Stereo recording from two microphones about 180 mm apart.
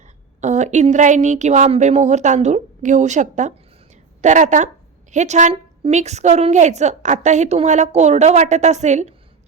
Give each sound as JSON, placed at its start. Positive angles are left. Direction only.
{"t": 0.4, "sound": "a woman's voice", "side_deg": -40}